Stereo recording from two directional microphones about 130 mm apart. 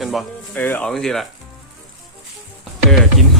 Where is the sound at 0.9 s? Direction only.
5° left (ahead or behind).